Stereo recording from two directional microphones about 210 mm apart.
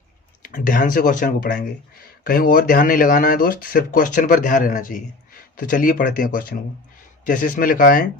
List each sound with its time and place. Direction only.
0.4 s speech: 40° left (ahead or behind)